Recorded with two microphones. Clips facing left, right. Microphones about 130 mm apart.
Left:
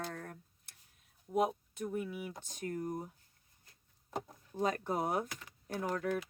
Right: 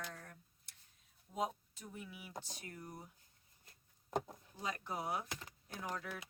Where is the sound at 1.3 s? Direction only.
65° left (ahead or behind); by 3.1 s 45° left (ahead or behind).